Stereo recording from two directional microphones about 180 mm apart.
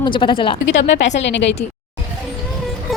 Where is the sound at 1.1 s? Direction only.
80° left.